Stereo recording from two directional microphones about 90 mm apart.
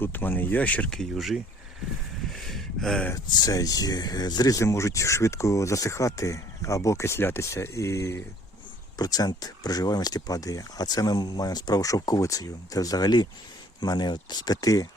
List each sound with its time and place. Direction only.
0.0 s speech: 20° left (ahead or behind); by 1.4 s centre (ahead or behind)
2.3 s a sound: centre (ahead or behind)
3.3 s speech: 45° left (ahead or behind)
9.0 s speech: 45° left (ahead or behind)